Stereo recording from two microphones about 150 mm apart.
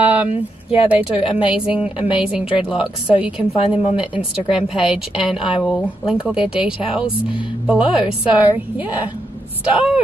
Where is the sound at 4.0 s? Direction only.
5° right (ahead or behind).